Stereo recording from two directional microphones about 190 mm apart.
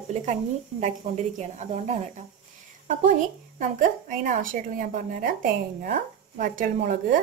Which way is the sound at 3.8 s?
45° right (ahead or behind).